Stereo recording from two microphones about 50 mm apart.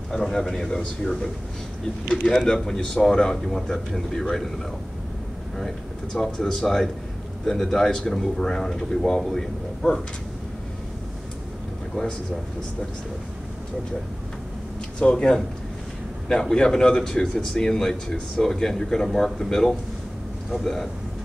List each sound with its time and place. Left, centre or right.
0.1 s a man's voice: centre
6.1 s speech: centre
15.0 s a man's voice: centre